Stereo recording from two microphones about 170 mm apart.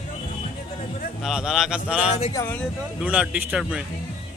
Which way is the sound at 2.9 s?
5° right (ahead or behind).